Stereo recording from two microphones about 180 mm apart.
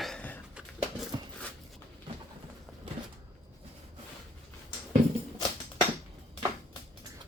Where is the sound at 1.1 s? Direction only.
20° right (ahead or behind).